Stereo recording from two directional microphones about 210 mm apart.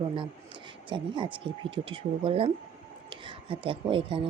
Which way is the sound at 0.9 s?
25° right (ahead or behind).